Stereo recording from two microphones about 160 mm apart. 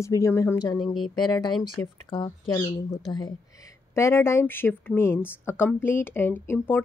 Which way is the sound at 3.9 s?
15° left (ahead or behind).